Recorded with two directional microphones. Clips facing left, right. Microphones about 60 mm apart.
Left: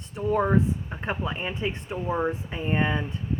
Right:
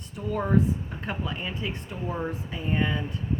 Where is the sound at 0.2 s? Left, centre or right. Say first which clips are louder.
Left 2 dB; left.